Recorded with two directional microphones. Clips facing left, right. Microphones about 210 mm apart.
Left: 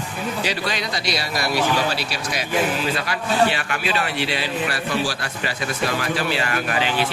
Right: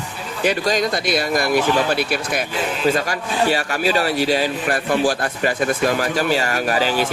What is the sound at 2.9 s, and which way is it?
A man's voice, 40° right (ahead or behind).